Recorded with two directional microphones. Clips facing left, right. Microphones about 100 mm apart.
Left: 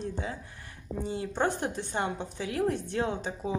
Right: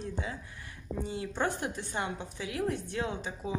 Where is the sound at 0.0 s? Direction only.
35° left (ahead or behind).